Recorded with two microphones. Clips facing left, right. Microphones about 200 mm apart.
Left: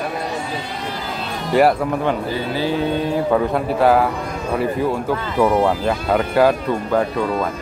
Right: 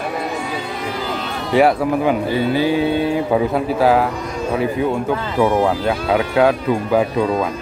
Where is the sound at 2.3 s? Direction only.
15° right (ahead or behind).